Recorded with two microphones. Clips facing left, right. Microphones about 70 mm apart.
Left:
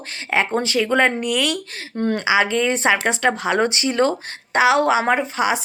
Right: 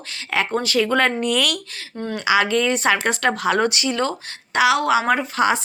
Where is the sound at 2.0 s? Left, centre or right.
Left.